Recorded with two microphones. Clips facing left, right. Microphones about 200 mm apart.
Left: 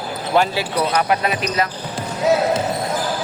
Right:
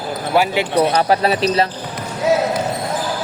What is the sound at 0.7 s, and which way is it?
Speech, 30° right (ahead or behind).